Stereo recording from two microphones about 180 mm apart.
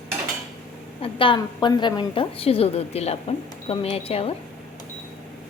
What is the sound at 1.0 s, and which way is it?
A woman's voice, 30° left (ahead or behind).